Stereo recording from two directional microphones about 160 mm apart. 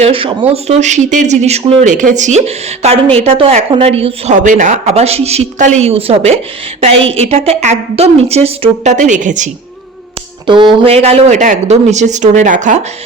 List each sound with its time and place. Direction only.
0.0 s a woman's voice: 35° right (ahead or behind)
0.8 s speech: 50° right (ahead or behind)
1.8 s a woman's voice: 50° right (ahead or behind)
4.4 s a woman's voice: 50° right (ahead or behind)
10.4 s speech: 30° right (ahead or behind); by 12.8 s 50° right (ahead or behind)